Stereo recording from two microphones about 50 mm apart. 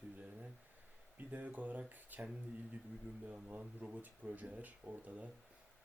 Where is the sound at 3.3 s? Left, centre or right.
Right.